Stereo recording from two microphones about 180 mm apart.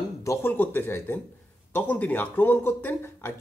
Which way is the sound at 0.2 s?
15° left (ahead or behind).